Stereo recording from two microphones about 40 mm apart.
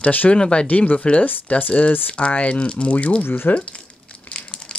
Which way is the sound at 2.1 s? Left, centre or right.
Left.